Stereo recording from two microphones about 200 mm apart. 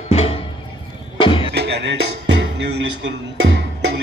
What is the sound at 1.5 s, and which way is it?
Music, 60° right (ahead or behind).